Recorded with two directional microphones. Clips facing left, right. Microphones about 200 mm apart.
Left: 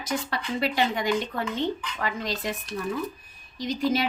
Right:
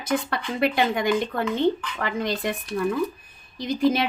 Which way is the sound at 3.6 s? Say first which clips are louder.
Right 4 dB; 55° right (ahead or behind).